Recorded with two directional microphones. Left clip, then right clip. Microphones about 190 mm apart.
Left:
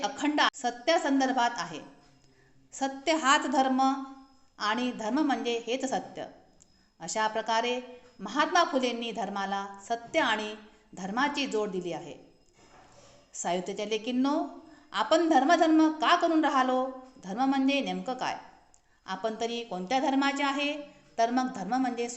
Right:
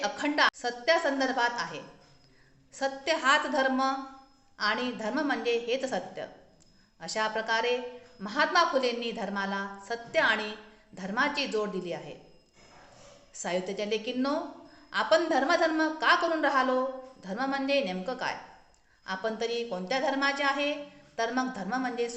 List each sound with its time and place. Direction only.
0.0 s a woman's voice: 45° left (ahead or behind)
13.3 s a woman's voice: 45° left (ahead or behind)